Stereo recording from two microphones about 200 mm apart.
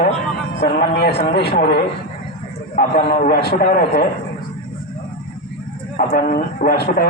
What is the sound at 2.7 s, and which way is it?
A man's voice, 45° left (ahead or behind).